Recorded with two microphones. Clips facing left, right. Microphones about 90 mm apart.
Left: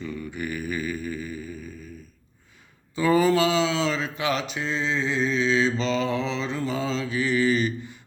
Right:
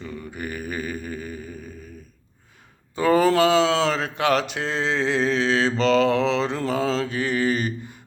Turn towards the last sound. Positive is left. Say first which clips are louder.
# left 1 dB
turn(degrees=-50)  # may be behind; listen again after turning